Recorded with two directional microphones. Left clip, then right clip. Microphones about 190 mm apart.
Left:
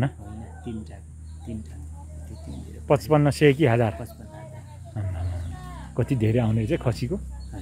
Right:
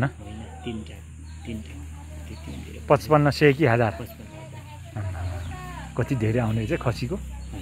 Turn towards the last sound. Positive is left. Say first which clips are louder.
# even
turn(degrees=35)  # may be behind; listen again after turning